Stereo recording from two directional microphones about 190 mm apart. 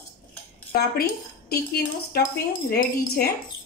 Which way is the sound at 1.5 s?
55° left (ahead or behind).